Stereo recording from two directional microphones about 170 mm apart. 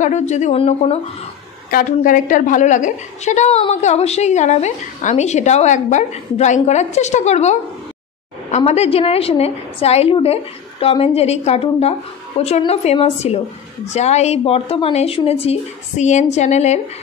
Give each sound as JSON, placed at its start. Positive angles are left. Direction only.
{"t": 0.0, "sound": "a woman's voice", "side_deg": 45}
{"t": 1.7, "sound": "a woman's voice", "side_deg": 55}